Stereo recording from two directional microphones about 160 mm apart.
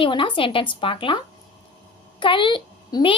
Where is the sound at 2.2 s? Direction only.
30° left (ahead or behind).